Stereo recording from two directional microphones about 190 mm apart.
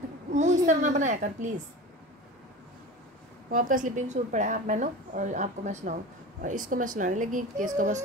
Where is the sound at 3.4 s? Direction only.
45° right (ahead or behind).